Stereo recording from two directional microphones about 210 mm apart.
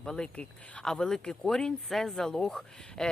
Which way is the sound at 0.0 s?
5° left (ahead or behind).